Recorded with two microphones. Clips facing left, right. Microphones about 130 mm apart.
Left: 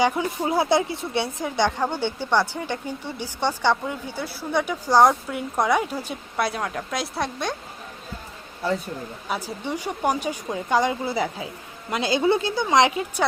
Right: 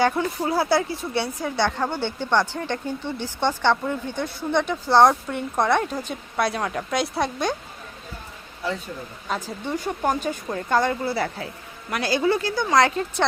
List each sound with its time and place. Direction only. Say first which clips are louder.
0.0 s speech: even; 15° left (ahead or behind); by 7.5 s centre (ahead or behind)
9.3 s speech: right 1 dB; 10° left (ahead or behind)